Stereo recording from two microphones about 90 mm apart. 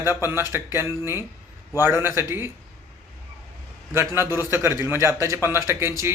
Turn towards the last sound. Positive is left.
turn(degrees=-30)  # may be behind; listen again after turning